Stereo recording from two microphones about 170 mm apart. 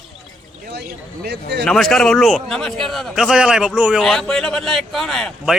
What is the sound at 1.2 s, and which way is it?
Speech, 75° right (ahead or behind).